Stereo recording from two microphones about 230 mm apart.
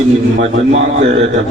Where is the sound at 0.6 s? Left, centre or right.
Right.